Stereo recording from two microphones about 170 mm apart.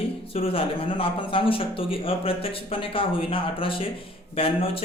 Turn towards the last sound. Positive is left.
turn(degrees=35)  # may be behind; listen again after turning